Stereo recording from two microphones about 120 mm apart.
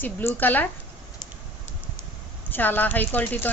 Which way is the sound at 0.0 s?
15° left (ahead or behind).